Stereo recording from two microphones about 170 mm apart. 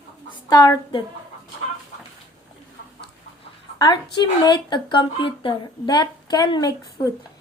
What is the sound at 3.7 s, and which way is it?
A woman's voice, 25° left (ahead or behind).